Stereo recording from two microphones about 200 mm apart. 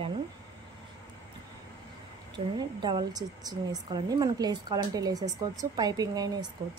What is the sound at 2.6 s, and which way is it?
A woman's voice, 20° right (ahead or behind).